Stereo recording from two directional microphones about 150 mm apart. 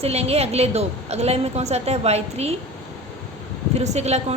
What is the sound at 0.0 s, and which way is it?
A woman's voice, 45° right (ahead or behind).